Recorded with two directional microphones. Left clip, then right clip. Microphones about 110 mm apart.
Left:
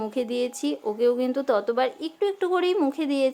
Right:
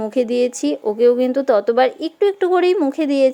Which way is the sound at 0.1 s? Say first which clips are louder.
Right 9 dB; 40° right (ahead or behind).